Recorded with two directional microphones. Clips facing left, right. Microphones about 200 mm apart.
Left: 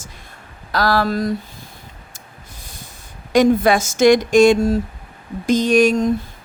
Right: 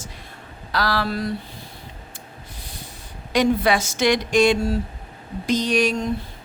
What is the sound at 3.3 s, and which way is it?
A woman's voice, 45° left (ahead or behind).